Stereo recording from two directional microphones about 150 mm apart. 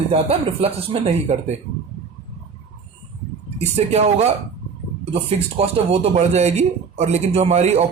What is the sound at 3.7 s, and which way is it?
Speech, 45° right (ahead or behind).